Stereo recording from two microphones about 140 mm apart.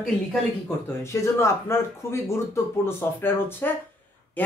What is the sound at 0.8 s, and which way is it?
Speech, 20° left (ahead or behind).